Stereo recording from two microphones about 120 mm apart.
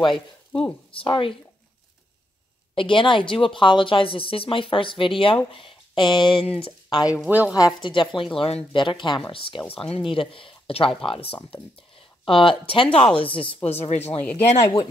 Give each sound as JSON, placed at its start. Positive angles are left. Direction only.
{"t": 0.9, "sound": "speech", "side_deg": 50}
{"t": 2.7, "sound": "speech", "side_deg": 45}
{"t": 7.1, "sound": "a woman's voice", "side_deg": -10}
{"t": 7.8, "sound": "speech", "side_deg": 45}
{"t": 8.7, "sound": "speech", "side_deg": 40}
{"t": 14.0, "sound": "speech", "side_deg": 15}